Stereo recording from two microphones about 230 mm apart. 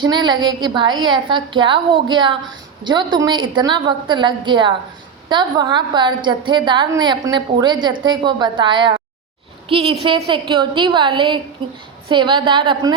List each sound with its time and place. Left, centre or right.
0.0 s a woman's voice: centre